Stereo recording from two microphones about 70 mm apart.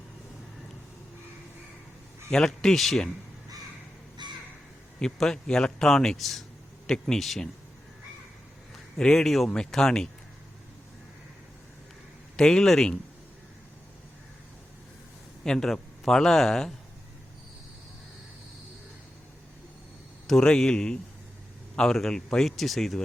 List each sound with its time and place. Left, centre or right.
2.3 s a man's voice: centre
4.2 s crow: right
4.9 s a man's voice: centre
9.0 s a man's voice: centre
12.4 s a man's voice: centre
15.4 s a man's voice: centre
20.2 s a man's voice: centre